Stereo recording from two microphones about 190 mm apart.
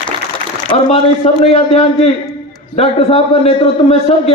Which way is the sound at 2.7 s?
30° left (ahead or behind).